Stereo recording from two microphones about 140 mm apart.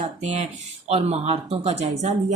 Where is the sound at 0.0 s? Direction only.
55° right (ahead or behind).